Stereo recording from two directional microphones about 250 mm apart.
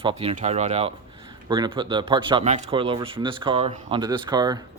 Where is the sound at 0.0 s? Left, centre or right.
Right.